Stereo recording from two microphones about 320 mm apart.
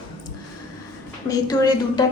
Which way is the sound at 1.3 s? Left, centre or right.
Centre.